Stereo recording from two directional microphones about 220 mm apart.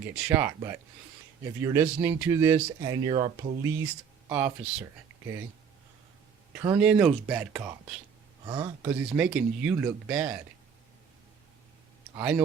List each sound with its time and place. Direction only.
0.0 s speech: 5° right (ahead or behind); by 3.5 s 25° right (ahead or behind)
3.6 s speech: 15° right (ahead or behind)
6.6 s speech: 10° right (ahead or behind)
8.4 s speech: 20° right (ahead or behind)
8.8 s speech: 5° right (ahead or behind)
12.1 s speech: 5° right (ahead or behind)